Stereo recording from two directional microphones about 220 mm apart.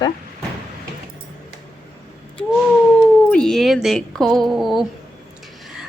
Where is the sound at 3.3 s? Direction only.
5° left (ahead or behind).